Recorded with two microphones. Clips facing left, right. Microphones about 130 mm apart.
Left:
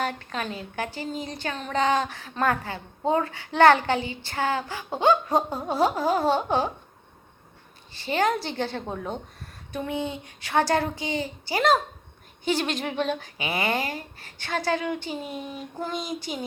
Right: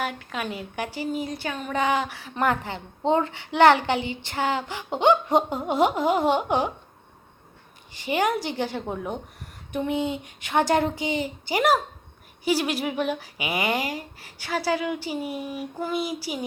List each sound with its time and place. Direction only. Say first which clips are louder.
0.0 s a woman's voice: even; 10° right (ahead or behind)
7.9 s a woman's voice: even; 15° right (ahead or behind)